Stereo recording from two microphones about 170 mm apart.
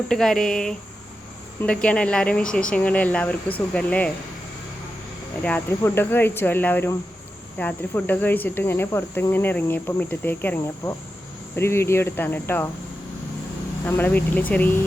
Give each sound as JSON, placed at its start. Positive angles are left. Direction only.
{"t": 0.1, "sound": "speech", "side_deg": 5}
{"t": 1.6, "sound": "cricket", "side_deg": 5}
{"t": 5.4, "sound": "cricket", "side_deg": 10}
{"t": 13.8, "sound": "cricket", "side_deg": 10}